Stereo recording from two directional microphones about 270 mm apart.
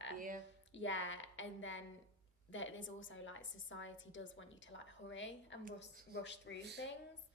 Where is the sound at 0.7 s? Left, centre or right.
Left.